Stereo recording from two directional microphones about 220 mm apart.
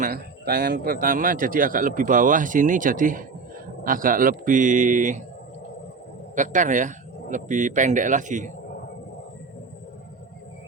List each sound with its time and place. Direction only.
0.0 s a man's voice: 40° right (ahead or behind)
6.3 s a man's voice: 35° right (ahead or behind)